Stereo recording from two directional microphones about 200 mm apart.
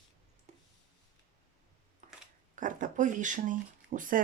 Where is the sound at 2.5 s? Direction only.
40° right (ahead or behind).